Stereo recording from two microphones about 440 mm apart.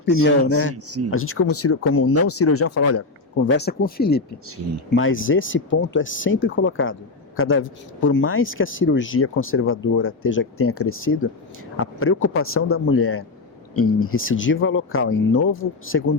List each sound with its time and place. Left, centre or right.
0.0 s speech: left
0.9 s speech: right
1.1 s speech: left